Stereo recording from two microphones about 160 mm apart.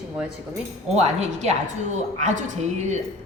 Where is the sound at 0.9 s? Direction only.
45° right (ahead or behind).